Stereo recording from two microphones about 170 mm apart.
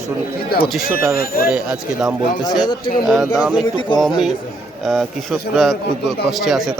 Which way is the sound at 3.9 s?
25° left (ahead or behind).